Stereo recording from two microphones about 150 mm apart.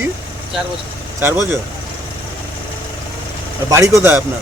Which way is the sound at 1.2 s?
15° right (ahead or behind).